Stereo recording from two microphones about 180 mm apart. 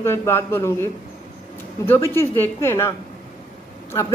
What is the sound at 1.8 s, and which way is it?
A man's voice, 10° left (ahead or behind).